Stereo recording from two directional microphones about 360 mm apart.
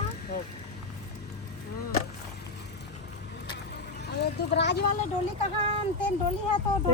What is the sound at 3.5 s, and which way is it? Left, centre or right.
Vehicle, left.